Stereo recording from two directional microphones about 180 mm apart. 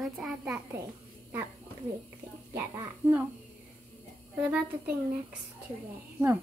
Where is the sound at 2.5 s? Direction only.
15° right (ahead or behind).